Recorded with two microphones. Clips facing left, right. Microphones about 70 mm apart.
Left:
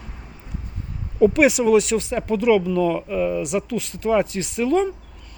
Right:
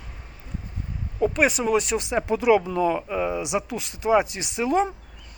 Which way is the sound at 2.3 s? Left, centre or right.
Right.